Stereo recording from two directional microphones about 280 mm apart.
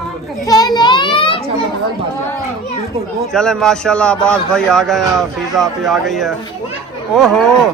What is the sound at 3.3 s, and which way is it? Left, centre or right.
Speech, centre.